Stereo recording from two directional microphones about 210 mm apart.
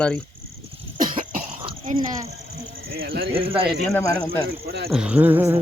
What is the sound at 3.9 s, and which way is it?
Speech, 10° left (ahead or behind).